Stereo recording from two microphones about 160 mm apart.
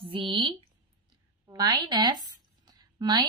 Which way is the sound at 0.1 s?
35° right (ahead or behind).